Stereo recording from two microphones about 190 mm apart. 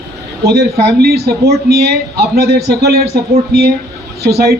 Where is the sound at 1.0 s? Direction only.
55° right (ahead or behind).